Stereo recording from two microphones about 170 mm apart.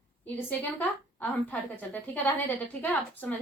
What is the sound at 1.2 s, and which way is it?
A woman's voice, 10° left (ahead or behind).